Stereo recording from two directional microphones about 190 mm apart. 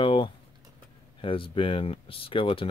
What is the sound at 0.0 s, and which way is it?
Typing, 25° left (ahead or behind).